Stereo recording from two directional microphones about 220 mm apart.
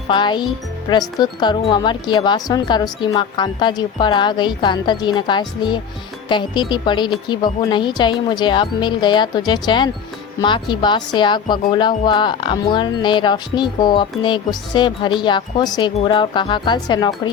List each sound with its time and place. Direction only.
0.1 s speech: 20° left (ahead or behind)